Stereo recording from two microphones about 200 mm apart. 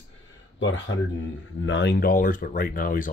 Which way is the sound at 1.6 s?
60° left (ahead or behind).